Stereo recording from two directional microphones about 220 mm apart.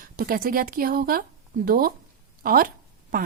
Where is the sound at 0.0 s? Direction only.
40° right (ahead or behind).